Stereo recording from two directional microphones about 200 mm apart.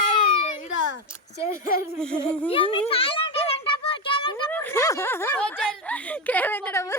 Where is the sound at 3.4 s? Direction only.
25° left (ahead or behind).